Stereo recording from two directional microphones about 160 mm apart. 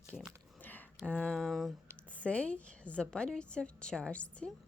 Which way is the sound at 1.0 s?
10° left (ahead or behind).